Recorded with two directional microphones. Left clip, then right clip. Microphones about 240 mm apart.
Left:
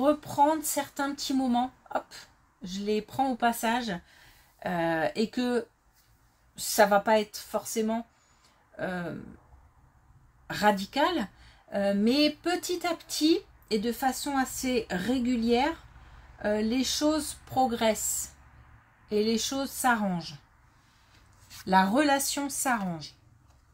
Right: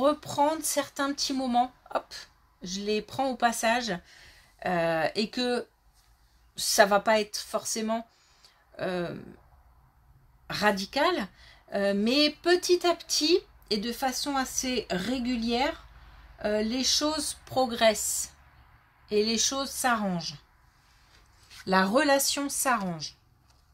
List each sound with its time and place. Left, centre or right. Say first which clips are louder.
0.0 s speech: left 1 dB; right
10.4 s speech: left 1 dB; right
21.6 s speech: even; right